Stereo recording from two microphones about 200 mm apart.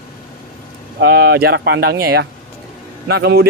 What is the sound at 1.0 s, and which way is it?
Speech, 55° right (ahead or behind).